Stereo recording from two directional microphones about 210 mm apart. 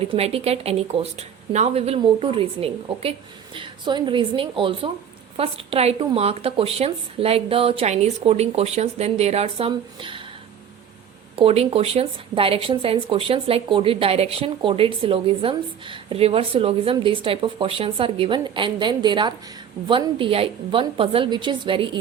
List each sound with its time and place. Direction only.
0.0 s speech: 30° right (ahead or behind)
11.3 s speech: 30° right (ahead or behind)